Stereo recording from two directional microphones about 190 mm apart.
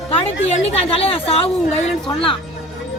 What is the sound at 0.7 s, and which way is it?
Speech, 30° left (ahead or behind).